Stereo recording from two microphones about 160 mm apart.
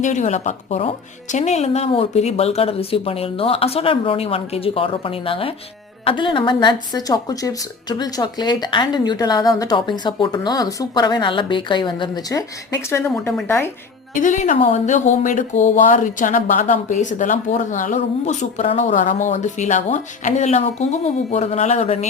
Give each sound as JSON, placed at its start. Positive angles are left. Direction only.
{"t": 0.0, "sound": "a woman's voice", "side_deg": 50}
{"t": 14.1, "sound": "speech", "side_deg": 55}